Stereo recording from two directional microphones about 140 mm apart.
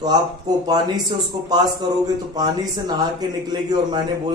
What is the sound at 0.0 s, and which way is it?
Speech, 30° right (ahead or behind).